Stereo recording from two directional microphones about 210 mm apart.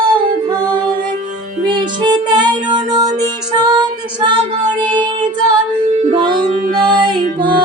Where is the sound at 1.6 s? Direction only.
20° right (ahead or behind).